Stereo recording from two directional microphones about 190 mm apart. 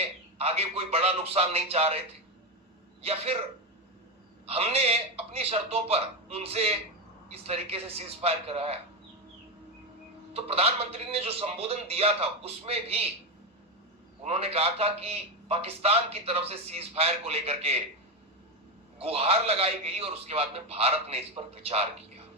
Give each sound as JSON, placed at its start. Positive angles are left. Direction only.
{"t": 0.3, "sound": "a man's voice", "side_deg": -30}
{"t": 3.0, "sound": "a man's voice", "side_deg": -30}
{"t": 4.4, "sound": "a man's voice", "side_deg": -30}
{"t": 10.3, "sound": "a man's voice", "side_deg": -30}
{"t": 14.3, "sound": "a man's voice", "side_deg": -30}
{"t": 18.9, "sound": "a man's voice", "side_deg": -30}